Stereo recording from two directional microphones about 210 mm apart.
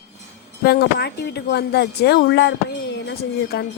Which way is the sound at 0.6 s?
50° left (ahead or behind).